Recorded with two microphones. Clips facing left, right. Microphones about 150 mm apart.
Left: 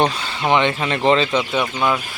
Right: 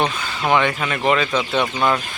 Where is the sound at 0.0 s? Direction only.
30° left (ahead or behind).